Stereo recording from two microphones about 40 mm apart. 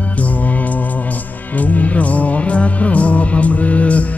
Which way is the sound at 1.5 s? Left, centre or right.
Left.